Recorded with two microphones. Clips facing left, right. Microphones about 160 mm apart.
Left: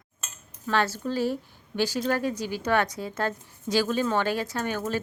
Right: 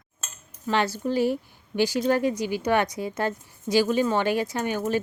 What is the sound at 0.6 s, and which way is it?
A woman's voice, 15° right (ahead or behind).